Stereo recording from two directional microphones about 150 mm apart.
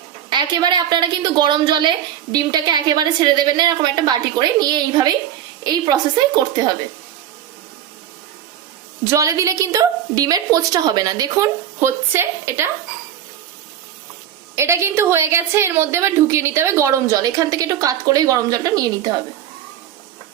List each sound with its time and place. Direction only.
0.3 s a woman's voice: 30° right (ahead or behind)
9.0 s a woman's voice: 20° right (ahead or behind)
14.5 s a woman's voice: 20° right (ahead or behind)